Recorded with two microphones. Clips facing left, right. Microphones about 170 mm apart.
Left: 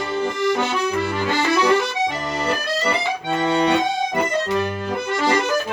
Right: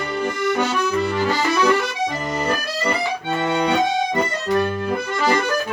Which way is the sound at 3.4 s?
15° left (ahead or behind).